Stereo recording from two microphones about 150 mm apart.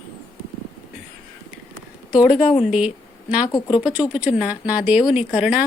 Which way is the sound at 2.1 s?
5° right (ahead or behind).